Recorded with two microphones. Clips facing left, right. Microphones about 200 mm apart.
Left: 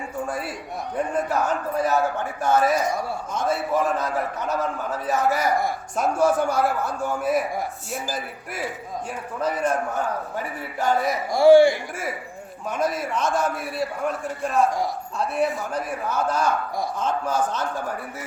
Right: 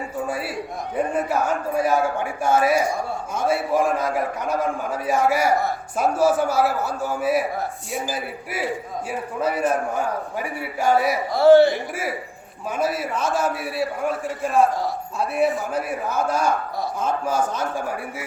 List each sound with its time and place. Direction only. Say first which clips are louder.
0.3 s a man's voice: right 3 dB; 5° right (ahead or behind)
11.3 s a man's voice: even; 10° left (ahead or behind)
12.7 s a man's voice: right 1 dB; 5° right (ahead or behind)